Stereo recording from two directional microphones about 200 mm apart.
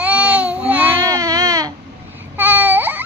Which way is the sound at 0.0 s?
5° right (ahead or behind).